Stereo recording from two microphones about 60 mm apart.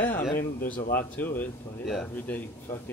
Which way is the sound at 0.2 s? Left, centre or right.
Left.